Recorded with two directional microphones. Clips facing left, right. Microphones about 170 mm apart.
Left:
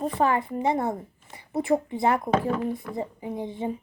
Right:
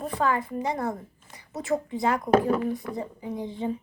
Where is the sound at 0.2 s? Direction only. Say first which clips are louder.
Left 2 dB; 20° left (ahead or behind).